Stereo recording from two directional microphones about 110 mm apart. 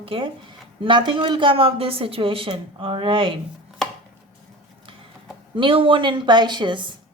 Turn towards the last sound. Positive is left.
turn(degrees=-45)  # may be behind; listen again after turning